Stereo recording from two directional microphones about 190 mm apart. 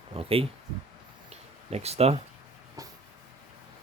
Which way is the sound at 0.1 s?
30° right (ahead or behind).